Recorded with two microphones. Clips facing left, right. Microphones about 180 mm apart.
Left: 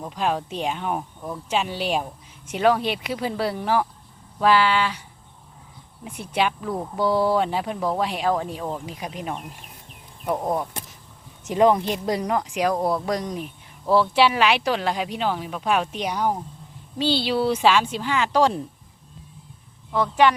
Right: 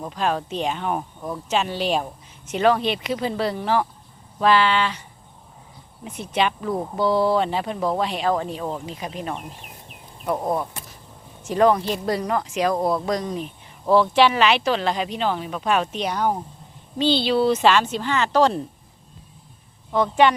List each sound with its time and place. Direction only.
0.1 s speech: 10° left (ahead or behind)
6.1 s speech: 10° left (ahead or behind)